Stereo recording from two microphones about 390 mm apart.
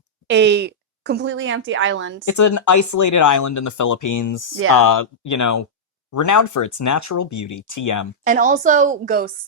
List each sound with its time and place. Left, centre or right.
0.3 s speech: right
2.2 s speech: left
8.2 s speech: centre